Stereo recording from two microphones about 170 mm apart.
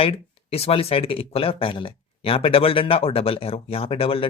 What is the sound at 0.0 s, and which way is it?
Speech, 35° left (ahead or behind).